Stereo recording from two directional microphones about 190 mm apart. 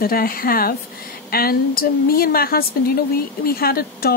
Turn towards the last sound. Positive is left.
turn(degrees=50)  # may be behind; listen again after turning